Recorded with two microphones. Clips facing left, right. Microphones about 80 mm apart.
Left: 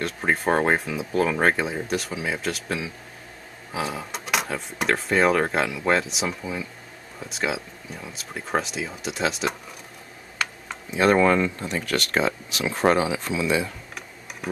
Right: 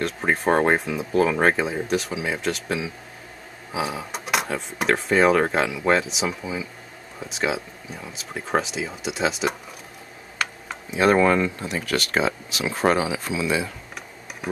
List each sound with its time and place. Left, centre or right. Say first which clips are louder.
0.0 s speech: right 1 dB; centre